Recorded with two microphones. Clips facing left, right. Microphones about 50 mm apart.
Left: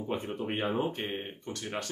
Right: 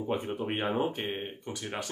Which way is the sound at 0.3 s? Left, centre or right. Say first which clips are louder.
Right 2 dB; centre.